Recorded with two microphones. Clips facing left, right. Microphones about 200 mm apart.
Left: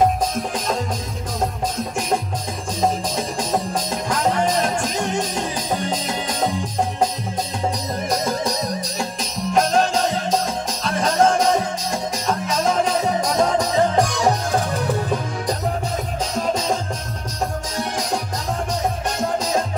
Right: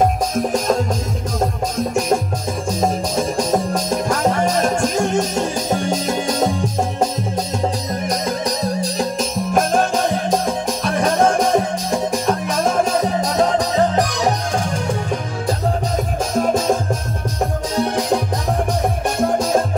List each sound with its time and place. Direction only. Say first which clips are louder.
3.2 s music: right 5 dB; 45° right (ahead or behind)
9.2 s music: even; 50° right (ahead or behind)
17.7 s music: right 7 dB; 60° right (ahead or behind)